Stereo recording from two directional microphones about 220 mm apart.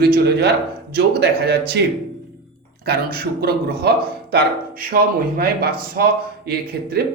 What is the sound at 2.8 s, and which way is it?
A man's voice, 45° right (ahead or behind).